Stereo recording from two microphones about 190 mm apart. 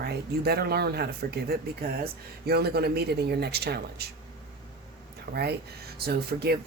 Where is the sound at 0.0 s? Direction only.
55° right (ahead or behind).